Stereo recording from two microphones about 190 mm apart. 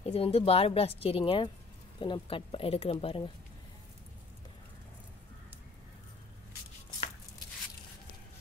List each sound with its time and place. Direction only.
0.0 s speech: 30° left (ahead or behind)